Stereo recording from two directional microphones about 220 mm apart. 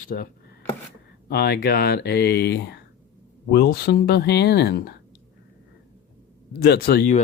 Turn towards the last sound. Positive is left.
turn(degrees=45)  # may be behind; listen again after turning